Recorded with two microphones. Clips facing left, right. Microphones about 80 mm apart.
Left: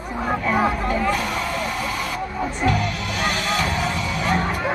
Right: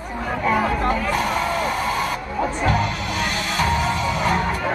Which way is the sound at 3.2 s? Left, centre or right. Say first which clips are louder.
Left 4 dB; left.